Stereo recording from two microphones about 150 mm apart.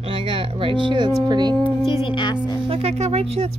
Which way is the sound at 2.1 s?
30° left (ahead or behind).